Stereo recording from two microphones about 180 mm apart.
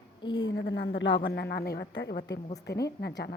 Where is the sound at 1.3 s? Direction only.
65° left (ahead or behind).